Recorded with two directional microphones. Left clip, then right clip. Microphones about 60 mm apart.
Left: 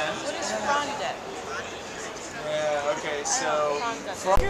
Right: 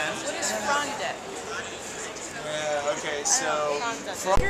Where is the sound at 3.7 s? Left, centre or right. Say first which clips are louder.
Even; centre.